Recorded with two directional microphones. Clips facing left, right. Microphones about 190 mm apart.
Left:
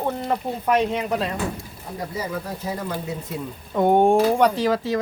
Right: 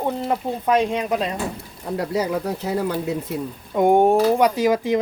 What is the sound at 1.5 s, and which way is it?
Speech, 70° right (ahead or behind).